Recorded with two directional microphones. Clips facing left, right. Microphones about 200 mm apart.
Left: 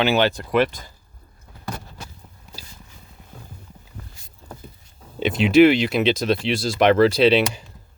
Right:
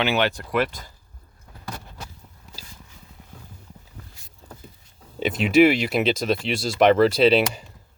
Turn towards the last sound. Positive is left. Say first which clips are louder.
# left 1 dB
turn(degrees=0)  # may be behind; listen again after turning